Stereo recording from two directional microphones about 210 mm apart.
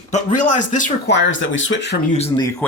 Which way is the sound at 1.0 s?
60° left (ahead or behind).